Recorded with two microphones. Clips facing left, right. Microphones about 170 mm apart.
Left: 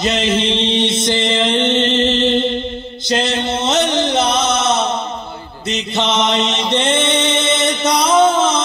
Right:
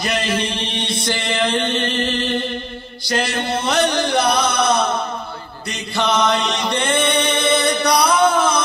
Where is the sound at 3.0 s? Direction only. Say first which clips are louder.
Left 3 dB; 20° left (ahead or behind).